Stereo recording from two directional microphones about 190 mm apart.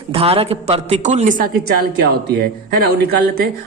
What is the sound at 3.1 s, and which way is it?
Speech, 55° right (ahead or behind).